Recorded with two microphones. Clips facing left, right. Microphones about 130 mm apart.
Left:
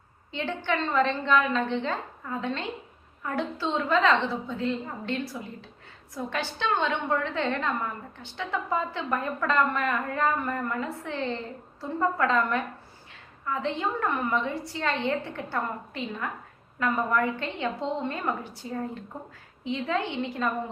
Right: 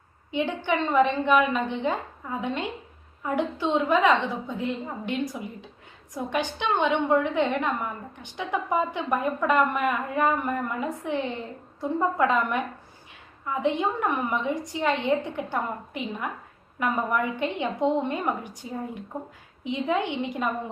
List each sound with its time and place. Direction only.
0.3 s a woman's voice: 15° right (ahead or behind)